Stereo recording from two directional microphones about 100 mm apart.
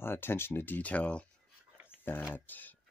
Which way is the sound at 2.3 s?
20° left (ahead or behind).